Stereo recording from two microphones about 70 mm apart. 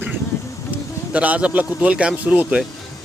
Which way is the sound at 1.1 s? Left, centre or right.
Centre.